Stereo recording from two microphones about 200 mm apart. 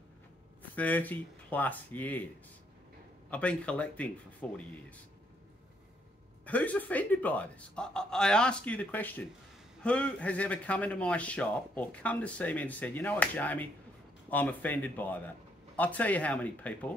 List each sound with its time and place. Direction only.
0.6 s speech: 10° left (ahead or behind)
3.3 s a man's voice: 5° left (ahead or behind)
6.4 s a man's voice: 10° left (ahead or behind)